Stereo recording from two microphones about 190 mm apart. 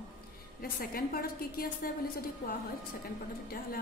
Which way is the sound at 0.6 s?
50° left (ahead or behind).